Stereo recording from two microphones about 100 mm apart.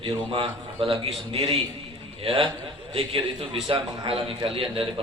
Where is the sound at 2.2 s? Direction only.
70° right (ahead or behind).